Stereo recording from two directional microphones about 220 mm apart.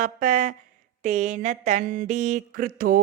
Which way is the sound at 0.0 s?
35° right (ahead or behind).